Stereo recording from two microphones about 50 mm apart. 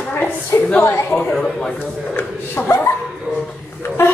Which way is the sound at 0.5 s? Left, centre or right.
Left.